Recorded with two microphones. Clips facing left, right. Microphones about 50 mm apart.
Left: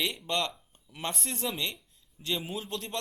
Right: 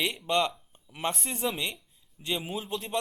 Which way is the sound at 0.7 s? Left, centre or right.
Centre.